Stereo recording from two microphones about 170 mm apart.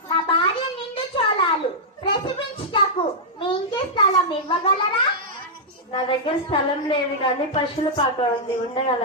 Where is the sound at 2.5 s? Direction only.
30° left (ahead or behind).